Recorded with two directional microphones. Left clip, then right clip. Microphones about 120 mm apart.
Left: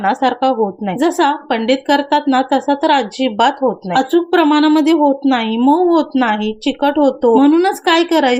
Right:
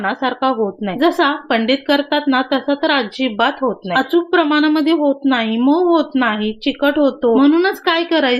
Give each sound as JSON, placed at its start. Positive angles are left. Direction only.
{"t": 0.0, "sound": "a woman's voice", "side_deg": 40}